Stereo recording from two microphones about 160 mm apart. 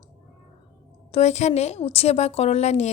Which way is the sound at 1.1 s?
45° left (ahead or behind).